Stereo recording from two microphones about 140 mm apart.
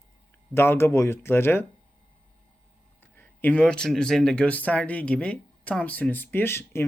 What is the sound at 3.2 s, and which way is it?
Speech, 10° left (ahead or behind).